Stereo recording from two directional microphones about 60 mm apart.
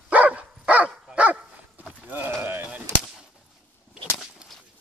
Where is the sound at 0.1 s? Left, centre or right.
Right.